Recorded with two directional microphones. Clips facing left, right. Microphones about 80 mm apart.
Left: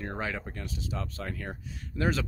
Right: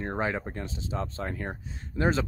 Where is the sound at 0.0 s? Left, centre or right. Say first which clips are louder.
Right 4 dB; right.